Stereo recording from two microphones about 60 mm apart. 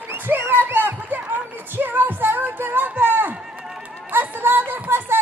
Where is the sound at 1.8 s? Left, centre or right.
Right.